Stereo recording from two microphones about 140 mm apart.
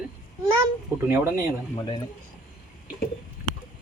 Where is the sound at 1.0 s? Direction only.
15° right (ahead or behind).